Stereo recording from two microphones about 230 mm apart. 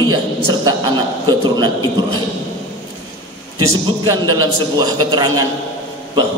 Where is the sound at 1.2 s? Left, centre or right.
Centre.